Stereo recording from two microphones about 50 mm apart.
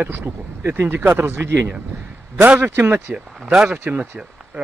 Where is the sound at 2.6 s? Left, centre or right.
Right.